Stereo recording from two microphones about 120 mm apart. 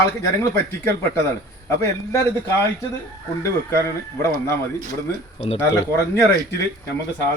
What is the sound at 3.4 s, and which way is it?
Speech, 20° left (ahead or behind).